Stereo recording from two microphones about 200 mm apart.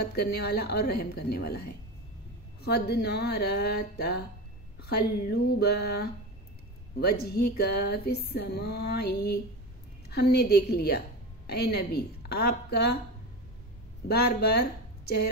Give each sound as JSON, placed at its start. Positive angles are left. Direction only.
{"t": 0.1, "sound": "music", "side_deg": 50}
{"t": 14.0, "sound": "speech", "side_deg": 50}